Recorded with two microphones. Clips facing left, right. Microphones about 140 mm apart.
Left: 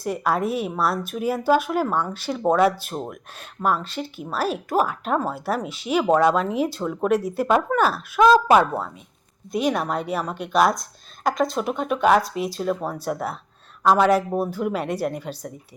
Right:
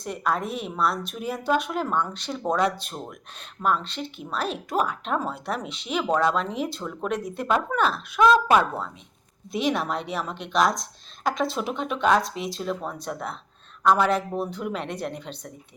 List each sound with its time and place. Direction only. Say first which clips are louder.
0.0 s speech: left 4 dB; 5° left (ahead or behind)
8.3 s speech: left 4 dB; 30° left (ahead or behind)
9.5 s speech: left 3 dB; centre (ahead or behind)